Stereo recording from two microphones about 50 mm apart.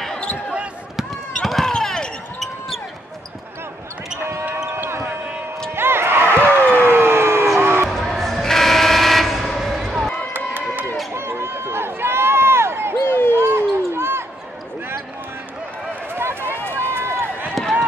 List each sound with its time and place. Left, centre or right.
0.9 s a sound: centre
1.7 s basketball bounce: centre
4.2 s basketball bounce: right
5.8 s a sound: right
7.9 s train: centre
10.3 s run: right
11.1 s run: right
13.0 s basketball bounce: left
13.4 s basketball bounce: right
16.2 s run: right